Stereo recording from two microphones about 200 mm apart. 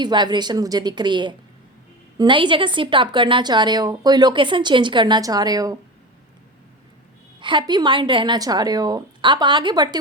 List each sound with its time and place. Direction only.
0.0 s a woman's voice: 20° right (ahead or behind)
7.3 s a woman's voice: 25° right (ahead or behind)